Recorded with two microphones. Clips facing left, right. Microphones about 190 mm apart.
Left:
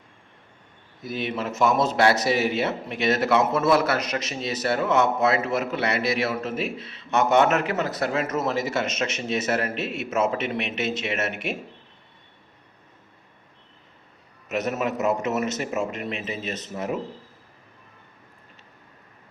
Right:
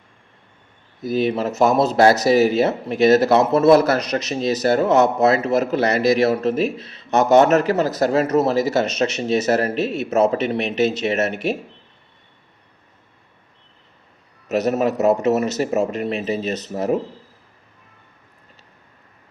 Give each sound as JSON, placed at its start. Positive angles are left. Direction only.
{"t": 1.0, "sound": "speech", "side_deg": -35}
{"t": 14.4, "sound": "speech", "side_deg": -35}